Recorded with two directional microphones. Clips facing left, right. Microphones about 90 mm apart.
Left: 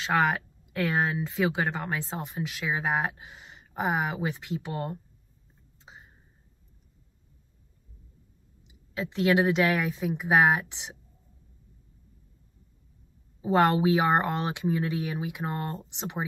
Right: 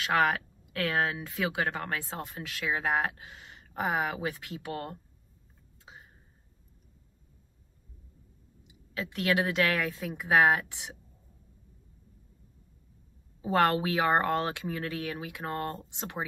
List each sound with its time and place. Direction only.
0.0 s speech: 25° left (ahead or behind)
8.6 s speech: 20° left (ahead or behind)
13.4 s speech: 20° left (ahead or behind)